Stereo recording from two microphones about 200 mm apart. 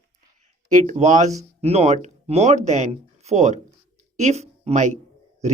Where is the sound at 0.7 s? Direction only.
40° right (ahead or behind).